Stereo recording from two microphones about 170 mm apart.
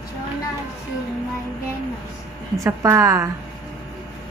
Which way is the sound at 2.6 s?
20° right (ahead or behind).